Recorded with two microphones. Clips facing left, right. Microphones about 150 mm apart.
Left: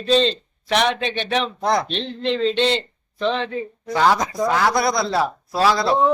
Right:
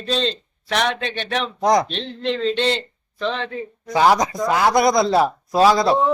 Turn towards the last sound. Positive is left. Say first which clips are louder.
# right 4 dB
turn(degrees=-20)  # may be behind; listen again after turning